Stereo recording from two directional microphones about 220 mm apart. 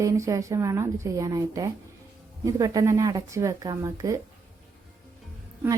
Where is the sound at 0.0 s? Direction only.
15° right (ahead or behind).